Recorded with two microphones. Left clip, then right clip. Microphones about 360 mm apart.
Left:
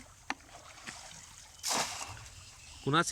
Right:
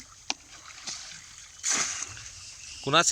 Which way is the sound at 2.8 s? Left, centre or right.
Centre.